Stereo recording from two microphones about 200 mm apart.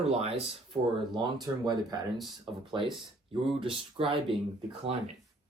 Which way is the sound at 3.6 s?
25° right (ahead or behind).